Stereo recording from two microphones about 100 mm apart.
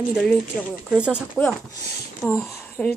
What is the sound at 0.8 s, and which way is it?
Speech, 10° right (ahead or behind).